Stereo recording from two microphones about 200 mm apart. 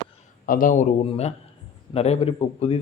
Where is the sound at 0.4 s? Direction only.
45° left (ahead or behind).